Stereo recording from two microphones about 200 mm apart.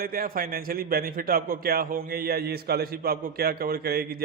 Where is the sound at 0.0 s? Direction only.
45° right (ahead or behind).